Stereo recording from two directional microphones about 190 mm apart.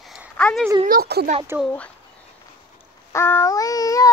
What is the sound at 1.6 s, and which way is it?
Speech, 5° left (ahead or behind).